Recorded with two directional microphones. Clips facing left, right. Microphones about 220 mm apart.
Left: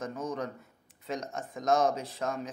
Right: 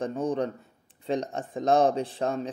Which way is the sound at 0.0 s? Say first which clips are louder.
Right 7 dB; 30° right (ahead or behind).